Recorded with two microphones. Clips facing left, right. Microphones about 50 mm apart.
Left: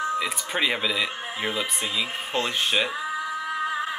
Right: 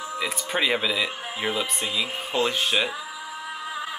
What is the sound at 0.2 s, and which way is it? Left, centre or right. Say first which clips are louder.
Speech: even; centre.